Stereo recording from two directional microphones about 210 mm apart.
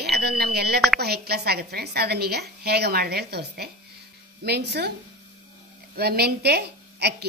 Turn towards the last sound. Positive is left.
turn(degrees=-50)  # may be behind; listen again after turning